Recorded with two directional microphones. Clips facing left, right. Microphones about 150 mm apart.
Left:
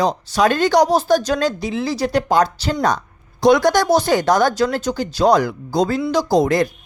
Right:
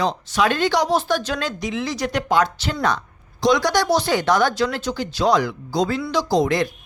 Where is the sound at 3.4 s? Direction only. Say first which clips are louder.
Left 5 dB; 50° left (ahead or behind).